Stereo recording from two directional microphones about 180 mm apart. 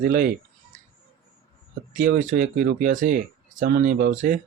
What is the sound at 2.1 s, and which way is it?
Speech, 50° right (ahead or behind).